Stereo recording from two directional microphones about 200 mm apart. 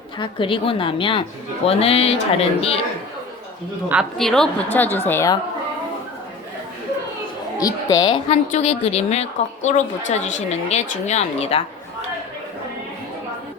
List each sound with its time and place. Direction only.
0.2 s speech: 25° left (ahead or behind)
3.8 s a woman's voice: centre (ahead or behind); by 5.4 s 15° left (ahead or behind)
7.6 s a woman's voice: 20° left (ahead or behind)